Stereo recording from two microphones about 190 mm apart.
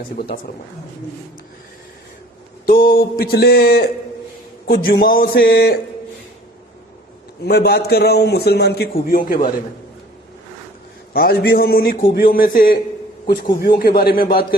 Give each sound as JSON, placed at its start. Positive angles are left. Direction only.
{"t": 2.6, "sound": "mantra", "side_deg": 50}
{"t": 7.4, "sound": "a man's voice", "side_deg": 55}
{"t": 11.1, "sound": "mantra", "side_deg": 55}